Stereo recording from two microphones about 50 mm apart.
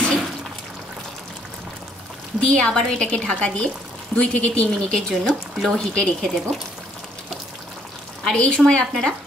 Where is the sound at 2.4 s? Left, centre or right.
Centre.